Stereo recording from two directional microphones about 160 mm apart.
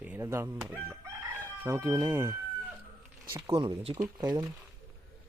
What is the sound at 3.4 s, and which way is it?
Speech, 30° right (ahead or behind).